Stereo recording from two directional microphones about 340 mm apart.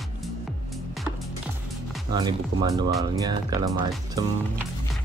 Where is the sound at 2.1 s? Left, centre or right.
Centre.